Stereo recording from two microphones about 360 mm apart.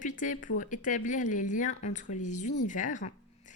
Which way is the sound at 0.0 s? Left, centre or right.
Left.